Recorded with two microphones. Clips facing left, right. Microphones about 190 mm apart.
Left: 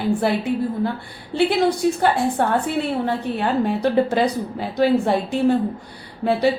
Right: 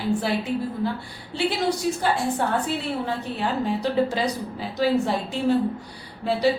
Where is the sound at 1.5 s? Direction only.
55° left (ahead or behind).